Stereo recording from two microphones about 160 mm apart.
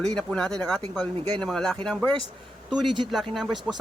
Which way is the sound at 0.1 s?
5° left (ahead or behind).